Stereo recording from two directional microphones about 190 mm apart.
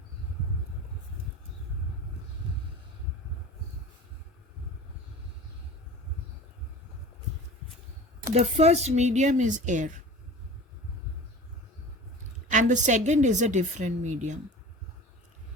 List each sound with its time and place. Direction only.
8.3 s a woman's voice: 35° right (ahead or behind)
12.5 s a woman's voice: 40° right (ahead or behind)